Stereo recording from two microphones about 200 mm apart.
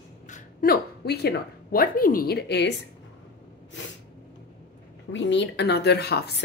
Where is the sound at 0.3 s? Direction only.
45° left (ahead or behind).